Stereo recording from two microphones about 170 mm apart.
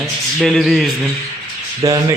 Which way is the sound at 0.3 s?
Centre (ahead or behind).